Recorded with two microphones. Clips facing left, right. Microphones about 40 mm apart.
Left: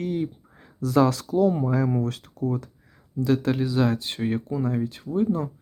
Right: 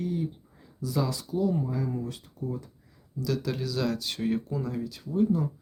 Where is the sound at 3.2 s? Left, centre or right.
Left.